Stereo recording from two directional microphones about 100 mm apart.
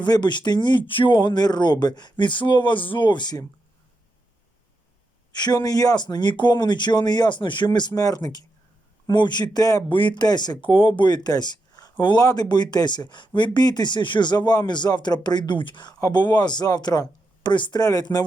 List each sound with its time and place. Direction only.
0.0 s speech: 50° left (ahead or behind)
5.3 s speech: 45° left (ahead or behind)
9.9 s speech: 55° left (ahead or behind); by 18.3 s 40° left (ahead or behind)